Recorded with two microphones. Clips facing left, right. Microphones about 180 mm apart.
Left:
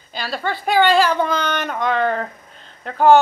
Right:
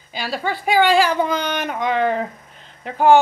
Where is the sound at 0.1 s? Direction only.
10° right (ahead or behind).